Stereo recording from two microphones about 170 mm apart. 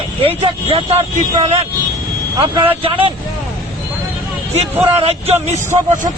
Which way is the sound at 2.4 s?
25° right (ahead or behind).